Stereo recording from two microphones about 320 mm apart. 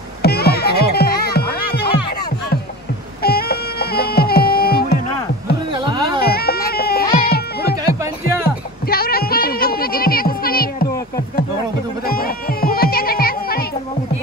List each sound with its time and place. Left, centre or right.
0.2 s music: left
3.2 s music: left
5.7 s music: centre
6.2 s music: left
8.5 s a sound: left
12.1 s music: left